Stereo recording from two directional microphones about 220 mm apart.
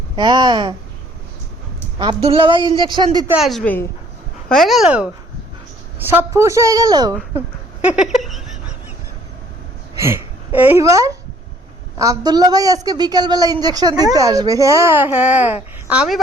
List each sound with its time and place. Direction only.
0.2 s a woman's voice: 20° right (ahead or behind)
2.0 s a woman's voice: 25° right (ahead or behind)
3.3 s a woman's voice: centre (ahead or behind); by 7.2 s 15° right (ahead or behind)
7.9 s a sound: 5° right (ahead or behind)
10.0 s a woman's voice: 10° right (ahead or behind)